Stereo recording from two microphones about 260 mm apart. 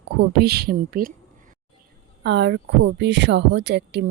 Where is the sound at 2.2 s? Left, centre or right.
Right.